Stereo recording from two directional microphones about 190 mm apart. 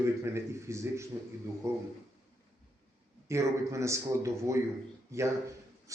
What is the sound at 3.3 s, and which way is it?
Speech, 15° right (ahead or behind).